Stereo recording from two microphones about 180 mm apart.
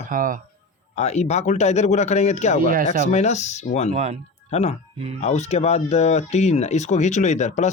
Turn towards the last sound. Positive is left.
turn(degrees=40)  # may be behind; listen again after turning